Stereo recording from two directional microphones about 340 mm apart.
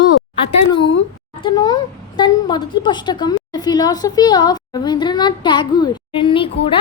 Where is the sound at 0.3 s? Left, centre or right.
Centre.